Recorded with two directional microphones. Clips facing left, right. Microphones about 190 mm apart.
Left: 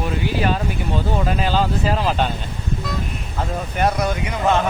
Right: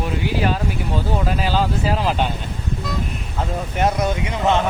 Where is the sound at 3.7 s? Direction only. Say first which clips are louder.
Even; 20° right (ahead or behind).